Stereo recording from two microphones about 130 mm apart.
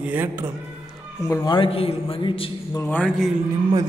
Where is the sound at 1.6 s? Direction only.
45° left (ahead or behind).